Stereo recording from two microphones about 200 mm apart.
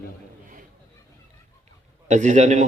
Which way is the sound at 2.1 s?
35° right (ahead or behind).